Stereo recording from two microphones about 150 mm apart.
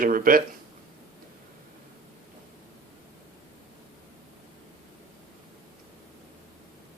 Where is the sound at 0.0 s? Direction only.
70° right (ahead or behind).